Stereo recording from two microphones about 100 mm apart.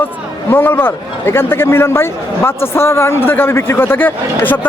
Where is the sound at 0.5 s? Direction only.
20° left (ahead or behind).